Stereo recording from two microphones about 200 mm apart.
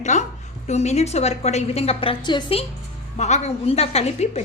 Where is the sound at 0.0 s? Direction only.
35° left (ahead or behind).